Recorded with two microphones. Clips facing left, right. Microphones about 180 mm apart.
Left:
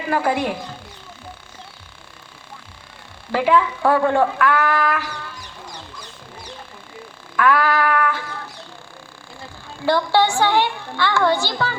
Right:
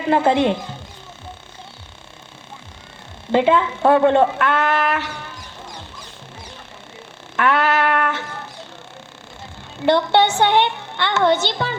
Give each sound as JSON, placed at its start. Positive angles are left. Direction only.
{"t": 0.1, "sound": "a child's voice", "side_deg": -25}
{"t": 3.3, "sound": "a child's voice", "side_deg": -25}
{"t": 7.3, "sound": "a child's voice", "side_deg": -25}
{"t": 9.8, "sound": "a child's voice", "side_deg": -20}